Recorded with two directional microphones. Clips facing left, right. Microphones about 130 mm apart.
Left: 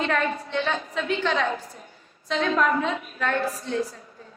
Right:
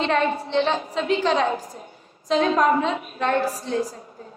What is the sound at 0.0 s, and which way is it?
A woman's voice, 25° right (ahead or behind).